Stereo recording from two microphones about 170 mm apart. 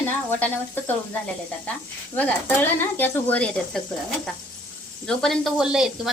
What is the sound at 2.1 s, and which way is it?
Speech, 10° left (ahead or behind).